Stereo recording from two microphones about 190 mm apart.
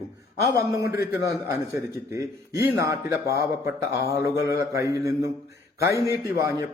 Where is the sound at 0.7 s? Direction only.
15° right (ahead or behind).